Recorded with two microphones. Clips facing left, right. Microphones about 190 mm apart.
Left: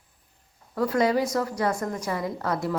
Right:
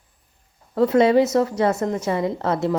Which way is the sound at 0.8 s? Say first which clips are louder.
Right 7 dB; 25° right (ahead or behind).